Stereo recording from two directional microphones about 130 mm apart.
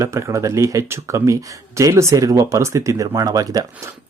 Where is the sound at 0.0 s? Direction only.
25° right (ahead or behind).